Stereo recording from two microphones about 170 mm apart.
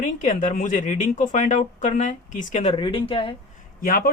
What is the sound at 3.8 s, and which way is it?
Speech, 55° left (ahead or behind).